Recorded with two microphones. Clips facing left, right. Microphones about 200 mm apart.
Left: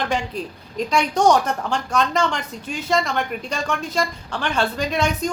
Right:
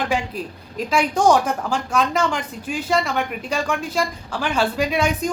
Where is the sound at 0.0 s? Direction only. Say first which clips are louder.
Right 1 dB; 5° right (ahead or behind).